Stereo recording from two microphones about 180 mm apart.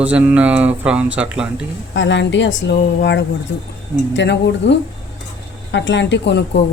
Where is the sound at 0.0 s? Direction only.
10° right (ahead or behind).